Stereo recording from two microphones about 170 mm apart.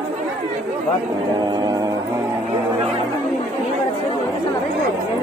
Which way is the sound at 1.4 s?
20° right (ahead or behind).